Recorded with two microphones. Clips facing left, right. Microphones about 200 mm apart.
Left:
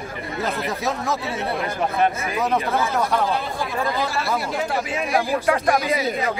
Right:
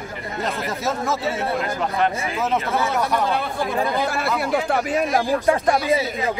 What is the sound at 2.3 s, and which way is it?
Speech, 15° left (ahead or behind).